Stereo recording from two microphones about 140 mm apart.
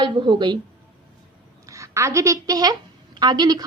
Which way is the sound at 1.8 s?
20° right (ahead or behind).